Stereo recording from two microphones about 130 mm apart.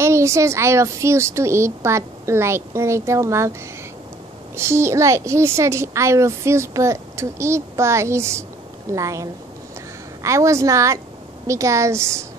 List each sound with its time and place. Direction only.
0.0 s a woman's voice: 20° right (ahead or behind)
4.6 s a woman's voice: 20° right (ahead or behind)